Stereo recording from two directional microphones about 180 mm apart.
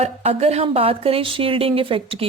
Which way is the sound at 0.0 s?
35° right (ahead or behind).